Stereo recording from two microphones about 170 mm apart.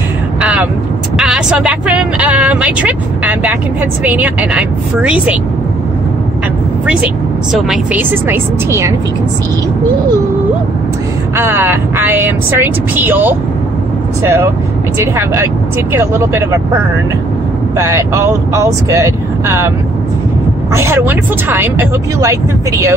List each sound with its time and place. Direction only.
0.4 s vehicle: 10° right (ahead or behind)
1.1 s speech: 5° right (ahead or behind)
7.5 s speech: 5° right (ahead or behind)
11.3 s speech: 15° right (ahead or behind)
15.1 s speech: 15° right (ahead or behind)
17.7 s speech: 15° right (ahead or behind)
20.7 s speech: 15° right (ahead or behind)